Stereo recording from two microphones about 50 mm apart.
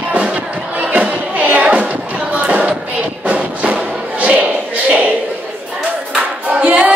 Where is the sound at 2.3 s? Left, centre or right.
Right.